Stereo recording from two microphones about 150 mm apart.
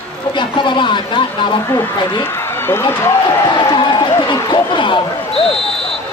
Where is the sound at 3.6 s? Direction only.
30° left (ahead or behind).